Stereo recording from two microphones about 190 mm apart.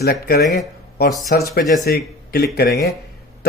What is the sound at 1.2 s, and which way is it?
Speech, 55° left (ahead or behind).